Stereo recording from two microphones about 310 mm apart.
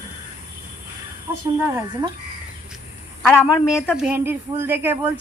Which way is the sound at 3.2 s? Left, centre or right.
Centre.